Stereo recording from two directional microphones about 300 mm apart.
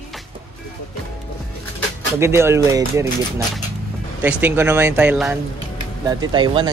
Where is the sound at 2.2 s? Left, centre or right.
Centre.